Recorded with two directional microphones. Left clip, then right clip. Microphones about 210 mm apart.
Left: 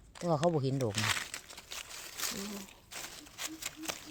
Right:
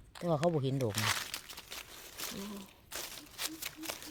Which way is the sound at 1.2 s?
20° right (ahead or behind).